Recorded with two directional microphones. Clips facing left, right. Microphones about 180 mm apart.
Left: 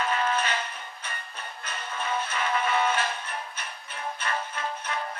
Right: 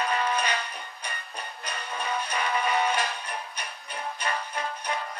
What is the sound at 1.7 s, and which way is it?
Music, 15° right (ahead or behind).